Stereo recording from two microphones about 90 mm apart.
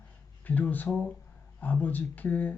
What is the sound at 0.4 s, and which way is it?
Speech, 20° left (ahead or behind).